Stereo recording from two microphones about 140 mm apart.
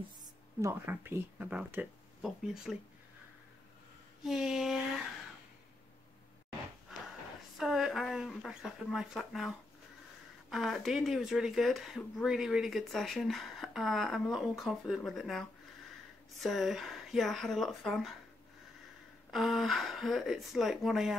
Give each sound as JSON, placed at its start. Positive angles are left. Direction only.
{"t": 0.6, "sound": "speech", "side_deg": -20}
{"t": 4.2, "sound": "speech", "side_deg": -5}
{"t": 6.9, "sound": "a sound", "side_deg": -5}
{"t": 7.5, "sound": "speech", "side_deg": 0}
{"t": 19.3, "sound": "speech", "side_deg": 0}